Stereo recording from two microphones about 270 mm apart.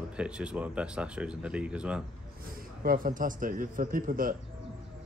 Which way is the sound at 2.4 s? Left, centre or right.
Right.